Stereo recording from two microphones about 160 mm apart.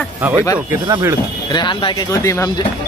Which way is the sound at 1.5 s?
30° left (ahead or behind).